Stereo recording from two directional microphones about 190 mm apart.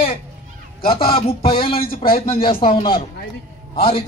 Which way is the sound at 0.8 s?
30° left (ahead or behind).